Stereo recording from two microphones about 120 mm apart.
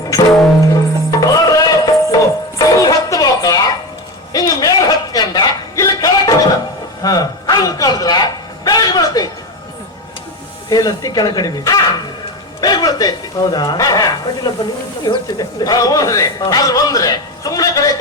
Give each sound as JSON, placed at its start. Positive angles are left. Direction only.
{"t": 0.6, "sound": "music", "side_deg": 30}
{"t": 4.3, "sound": "a sound", "side_deg": 30}
{"t": 10.7, "sound": "a man's voice", "side_deg": 30}